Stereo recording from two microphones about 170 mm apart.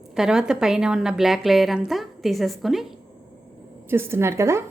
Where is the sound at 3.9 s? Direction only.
15° right (ahead or behind).